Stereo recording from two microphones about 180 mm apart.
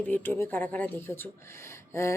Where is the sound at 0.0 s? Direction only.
10° left (ahead or behind).